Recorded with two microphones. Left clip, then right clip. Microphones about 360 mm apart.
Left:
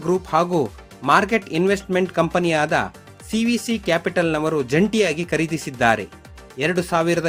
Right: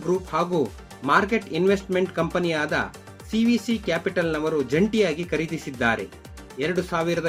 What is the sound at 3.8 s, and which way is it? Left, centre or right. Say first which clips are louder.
Speech: left 7 dB; left.